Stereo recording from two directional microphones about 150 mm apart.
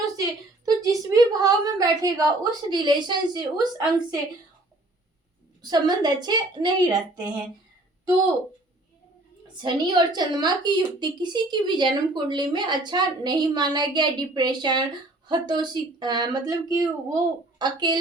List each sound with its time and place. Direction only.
0.6 s a woman's voice: 25° right (ahead or behind)
5.6 s a woman's voice: 25° right (ahead or behind)
9.6 s a woman's voice: 30° right (ahead or behind)